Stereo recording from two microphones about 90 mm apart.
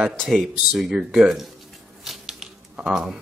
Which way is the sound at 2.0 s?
5° right (ahead or behind).